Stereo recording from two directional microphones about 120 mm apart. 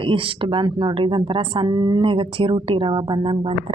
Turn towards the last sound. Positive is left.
turn(degrees=-45)  # may be behind; listen again after turning